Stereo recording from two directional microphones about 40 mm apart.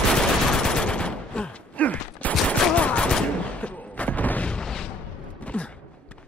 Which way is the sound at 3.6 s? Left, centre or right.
Left.